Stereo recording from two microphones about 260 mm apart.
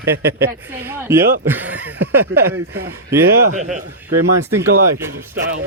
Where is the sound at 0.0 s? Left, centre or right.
Centre.